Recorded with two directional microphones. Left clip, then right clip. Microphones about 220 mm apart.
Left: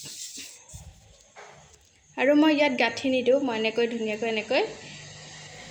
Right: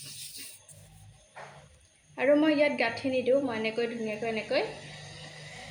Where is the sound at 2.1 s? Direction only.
40° left (ahead or behind).